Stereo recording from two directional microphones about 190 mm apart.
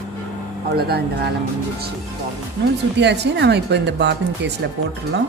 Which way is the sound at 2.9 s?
65° right (ahead or behind).